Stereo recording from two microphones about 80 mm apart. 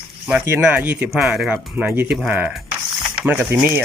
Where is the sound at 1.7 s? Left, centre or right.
Right.